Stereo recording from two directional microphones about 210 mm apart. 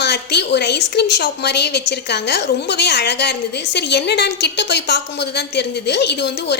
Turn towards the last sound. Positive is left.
turn(degrees=55)  # may be behind; listen again after turning